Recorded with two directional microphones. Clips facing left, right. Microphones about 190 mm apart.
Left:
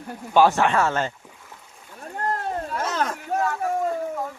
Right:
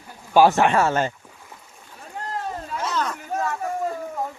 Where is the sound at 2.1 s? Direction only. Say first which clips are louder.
Left 3 dB; 55° left (ahead or behind).